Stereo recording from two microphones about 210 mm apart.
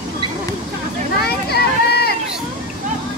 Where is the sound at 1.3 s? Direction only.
50° left (ahead or behind).